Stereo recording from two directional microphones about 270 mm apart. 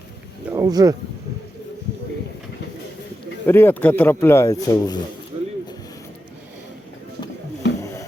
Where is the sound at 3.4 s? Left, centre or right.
Centre.